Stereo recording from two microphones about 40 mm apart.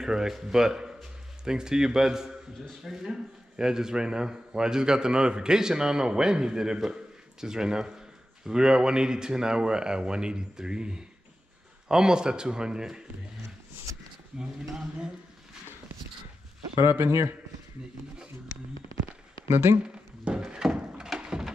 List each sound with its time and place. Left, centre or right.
0.0 s a man's voice: centre
16.8 s speech: right
19.4 s speech: right
19.8 s a sound: right